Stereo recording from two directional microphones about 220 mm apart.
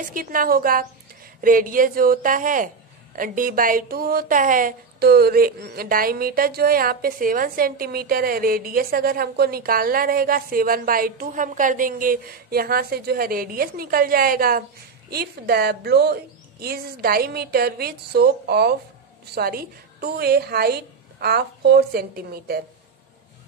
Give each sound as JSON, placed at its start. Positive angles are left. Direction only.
{"t": 0.1, "sound": "a woman's voice", "side_deg": -40}